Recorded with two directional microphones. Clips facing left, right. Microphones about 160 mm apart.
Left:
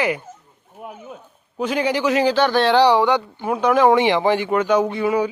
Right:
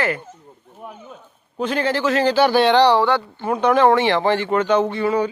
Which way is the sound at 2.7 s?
10° left (ahead or behind).